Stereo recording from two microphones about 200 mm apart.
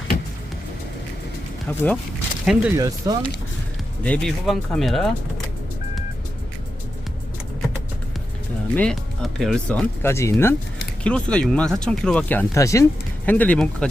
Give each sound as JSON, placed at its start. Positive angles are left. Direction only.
{"t": 2.4, "sound": "speech", "side_deg": -5}
{"t": 2.7, "sound": "speech", "side_deg": -15}
{"t": 4.0, "sound": "speech", "side_deg": 5}
{"t": 8.7, "sound": "speech", "side_deg": 5}